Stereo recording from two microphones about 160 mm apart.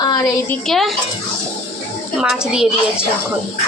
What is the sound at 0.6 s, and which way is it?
Speech, centre (ahead or behind).